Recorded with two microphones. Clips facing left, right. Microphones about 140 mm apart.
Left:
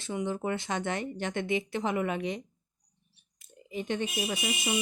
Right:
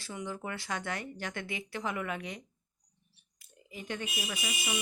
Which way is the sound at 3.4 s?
25° left (ahead or behind).